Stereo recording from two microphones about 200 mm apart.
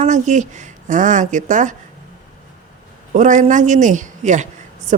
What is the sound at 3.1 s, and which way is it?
A woman's voice, 35° right (ahead or behind).